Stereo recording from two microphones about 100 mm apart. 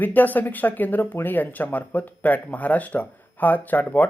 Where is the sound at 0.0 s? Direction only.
20° left (ahead or behind).